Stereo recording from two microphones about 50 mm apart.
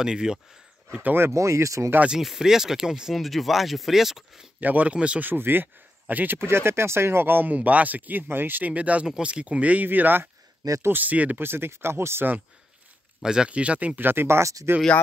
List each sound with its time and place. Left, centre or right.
0.0 s speech: centre
1.3 s speech: right
2.2 s speech: centre
3.3 s speech: centre
4.6 s speech: right
4.9 s speech: right
5.2 s speech: right
6.3 s speech: right
9.0 s speech: centre; by 11.4 s right
11.4 s speech: right
11.7 s speech: right
13.2 s speech: centre
13.5 s speech: right
13.9 s speech: right